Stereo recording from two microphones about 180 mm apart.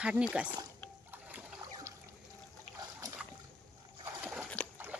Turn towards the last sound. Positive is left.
turn(degrees=-5)  # may be behind; listen again after turning